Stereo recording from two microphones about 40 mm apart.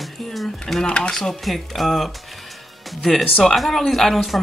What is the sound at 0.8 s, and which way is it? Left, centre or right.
Speech, left.